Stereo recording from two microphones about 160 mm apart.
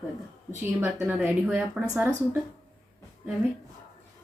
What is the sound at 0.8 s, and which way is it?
A woman's voice, 10° right (ahead or behind).